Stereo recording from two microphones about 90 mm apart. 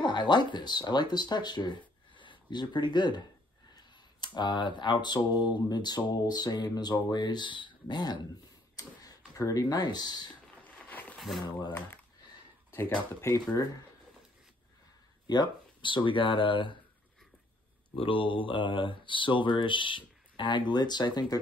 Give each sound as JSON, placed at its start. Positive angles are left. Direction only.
{"t": 0.0, "sound": "speech", "side_deg": 55}
{"t": 10.9, "sound": "a sound", "side_deg": 20}
{"t": 11.1, "sound": "speech", "side_deg": 0}
{"t": 13.2, "sound": "speech", "side_deg": 30}
{"t": 15.2, "sound": "speech", "side_deg": 55}
{"t": 17.9, "sound": "speech", "side_deg": 75}